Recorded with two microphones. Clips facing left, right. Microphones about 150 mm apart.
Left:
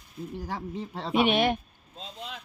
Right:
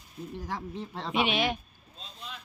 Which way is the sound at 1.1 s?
50° left (ahead or behind).